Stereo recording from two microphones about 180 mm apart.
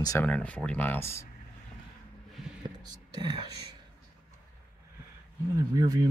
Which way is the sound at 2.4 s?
Centre (ahead or behind).